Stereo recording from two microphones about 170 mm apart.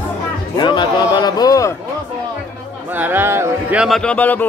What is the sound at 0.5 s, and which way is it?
A man's voice, 25° left (ahead or behind).